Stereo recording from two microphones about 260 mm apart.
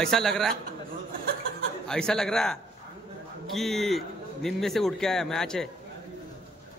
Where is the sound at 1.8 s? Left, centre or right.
Centre.